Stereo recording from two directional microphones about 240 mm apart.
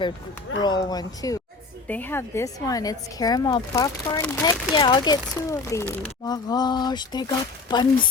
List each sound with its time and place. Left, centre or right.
0.6 s speech: centre
4.7 s speech: centre